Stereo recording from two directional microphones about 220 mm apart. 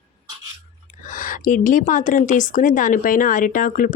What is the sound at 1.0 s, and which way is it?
Speech, 40° left (ahead or behind).